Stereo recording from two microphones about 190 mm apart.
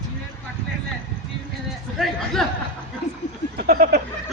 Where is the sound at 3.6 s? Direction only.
55° right (ahead or behind).